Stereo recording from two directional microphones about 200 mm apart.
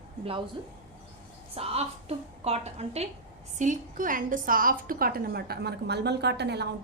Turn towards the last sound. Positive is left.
turn(degrees=-55)  # may be behind; listen again after turning